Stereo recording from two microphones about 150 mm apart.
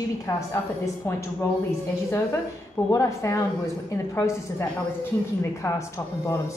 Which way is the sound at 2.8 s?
20° left (ahead or behind).